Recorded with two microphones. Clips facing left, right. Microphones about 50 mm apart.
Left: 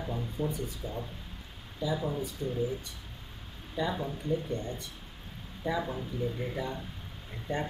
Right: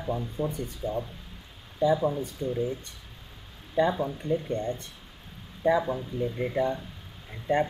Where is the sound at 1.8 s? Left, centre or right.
Right.